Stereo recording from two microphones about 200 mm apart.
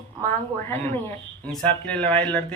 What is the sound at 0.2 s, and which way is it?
Speech, 10° left (ahead or behind).